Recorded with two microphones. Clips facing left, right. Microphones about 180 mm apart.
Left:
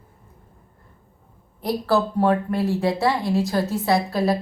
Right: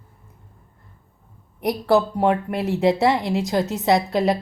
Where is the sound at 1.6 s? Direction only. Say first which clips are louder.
Right 2 dB; 20° right (ahead or behind).